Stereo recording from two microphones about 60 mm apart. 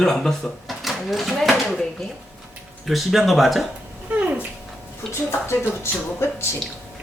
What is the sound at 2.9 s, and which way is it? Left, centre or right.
Speech, centre.